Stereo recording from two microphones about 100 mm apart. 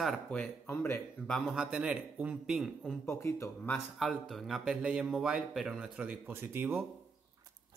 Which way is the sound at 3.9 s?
Centre (ahead or behind).